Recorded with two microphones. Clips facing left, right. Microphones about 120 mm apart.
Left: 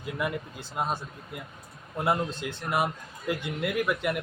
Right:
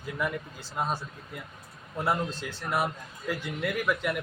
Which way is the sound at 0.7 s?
10° left (ahead or behind).